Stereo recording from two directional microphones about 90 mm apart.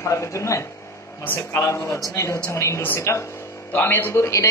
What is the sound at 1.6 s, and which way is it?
A man's voice, 35° left (ahead or behind).